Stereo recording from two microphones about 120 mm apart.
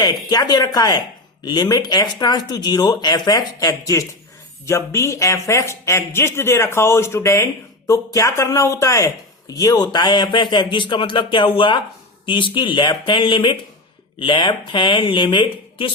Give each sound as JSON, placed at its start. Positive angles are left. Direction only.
{"t": 0.0, "sound": "speech", "side_deg": 35}